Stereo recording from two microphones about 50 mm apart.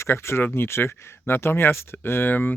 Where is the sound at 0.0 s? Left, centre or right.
Left.